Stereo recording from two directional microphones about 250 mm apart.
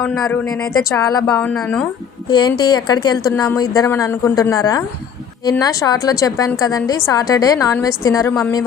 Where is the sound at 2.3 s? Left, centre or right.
Centre.